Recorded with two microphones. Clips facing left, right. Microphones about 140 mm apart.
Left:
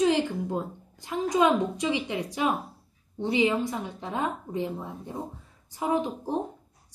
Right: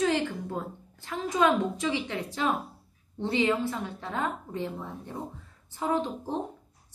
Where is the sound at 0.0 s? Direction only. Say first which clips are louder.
Left 3 dB; 15° left (ahead or behind).